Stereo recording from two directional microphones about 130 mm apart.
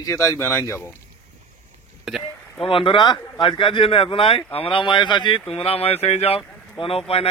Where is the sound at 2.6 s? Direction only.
40° left (ahead or behind).